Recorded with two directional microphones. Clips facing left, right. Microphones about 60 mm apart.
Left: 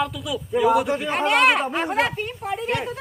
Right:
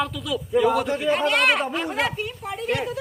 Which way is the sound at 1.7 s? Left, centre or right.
Left.